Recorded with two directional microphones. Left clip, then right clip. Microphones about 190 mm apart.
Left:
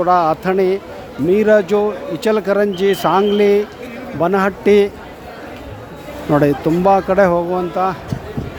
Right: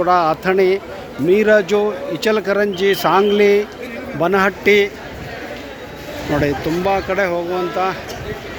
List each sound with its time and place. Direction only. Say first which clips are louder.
0.1 s speech: left 1 dB; 25° left (ahead or behind)
6.4 s speech: left 4 dB; 35° left (ahead or behind)